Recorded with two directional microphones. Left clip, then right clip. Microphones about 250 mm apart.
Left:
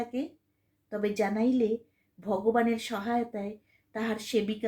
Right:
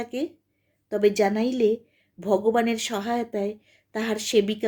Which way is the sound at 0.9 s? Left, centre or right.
Right.